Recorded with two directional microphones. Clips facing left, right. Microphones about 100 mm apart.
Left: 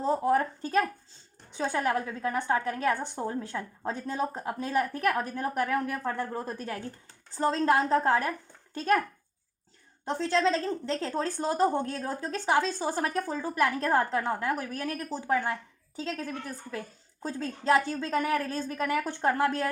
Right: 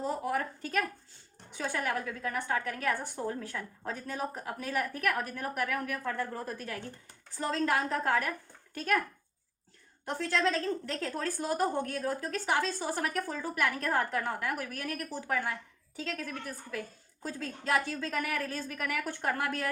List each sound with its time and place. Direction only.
0.0 s a sound: 30° left (ahead or behind)
1.5 s a woman's voice: 30° left (ahead or behind)
10.1 s a woman's voice: 25° left (ahead or behind)